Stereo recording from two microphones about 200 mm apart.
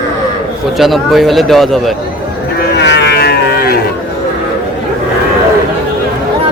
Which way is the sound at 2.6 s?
60° left (ahead or behind).